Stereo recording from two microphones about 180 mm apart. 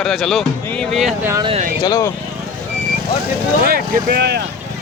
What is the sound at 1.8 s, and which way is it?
Speech, 20° left (ahead or behind).